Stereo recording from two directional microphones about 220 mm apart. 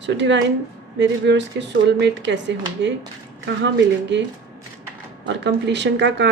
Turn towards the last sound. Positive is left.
turn(degrees=-55)  # may be behind; listen again after turning